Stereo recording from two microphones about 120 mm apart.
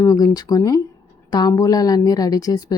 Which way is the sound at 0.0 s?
30° left (ahead or behind).